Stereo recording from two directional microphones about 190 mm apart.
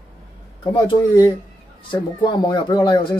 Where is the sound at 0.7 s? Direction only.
25° left (ahead or behind).